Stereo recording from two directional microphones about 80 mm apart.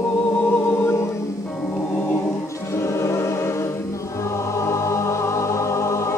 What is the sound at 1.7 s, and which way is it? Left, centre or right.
Choir, left.